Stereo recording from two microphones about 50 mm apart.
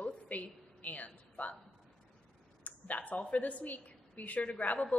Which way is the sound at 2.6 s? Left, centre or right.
Left.